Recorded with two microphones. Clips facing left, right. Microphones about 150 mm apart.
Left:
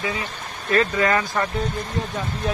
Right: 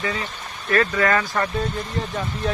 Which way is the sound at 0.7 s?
20° left (ahead or behind).